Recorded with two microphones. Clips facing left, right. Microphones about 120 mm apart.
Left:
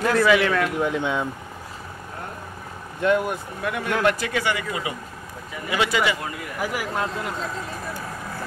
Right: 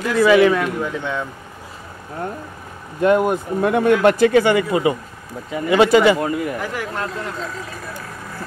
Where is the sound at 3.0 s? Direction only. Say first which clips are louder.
Right 6 dB; 35° right (ahead or behind).